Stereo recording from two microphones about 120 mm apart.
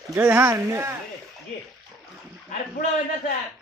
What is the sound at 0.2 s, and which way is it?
Speech, 15° right (ahead or behind).